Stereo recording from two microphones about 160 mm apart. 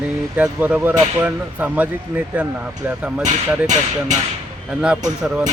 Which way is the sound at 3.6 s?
50° right (ahead or behind).